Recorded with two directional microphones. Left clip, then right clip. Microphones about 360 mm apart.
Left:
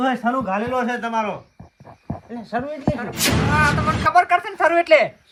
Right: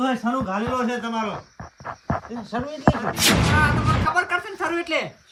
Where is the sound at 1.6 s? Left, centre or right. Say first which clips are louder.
Right 10 dB; left.